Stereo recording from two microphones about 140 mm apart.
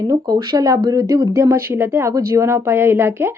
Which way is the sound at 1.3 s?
20° right (ahead or behind).